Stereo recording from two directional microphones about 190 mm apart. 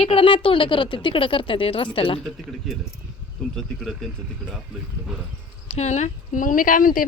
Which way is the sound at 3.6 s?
Centre (ahead or behind).